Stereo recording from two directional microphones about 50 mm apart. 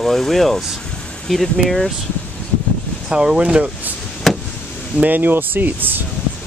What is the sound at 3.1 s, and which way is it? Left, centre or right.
Speech, centre.